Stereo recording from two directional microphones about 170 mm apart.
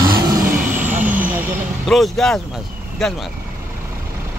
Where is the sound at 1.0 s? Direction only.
10° right (ahead or behind).